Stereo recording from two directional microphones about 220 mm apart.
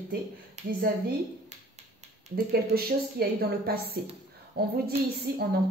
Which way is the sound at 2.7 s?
45° right (ahead or behind).